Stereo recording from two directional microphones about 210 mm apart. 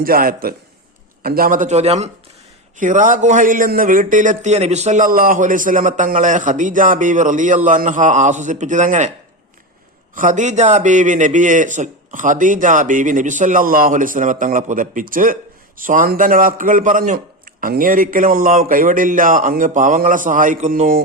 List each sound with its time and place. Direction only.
0.0 s a man's voice: 45° right (ahead or behind)
10.2 s a man's voice: 35° right (ahead or behind)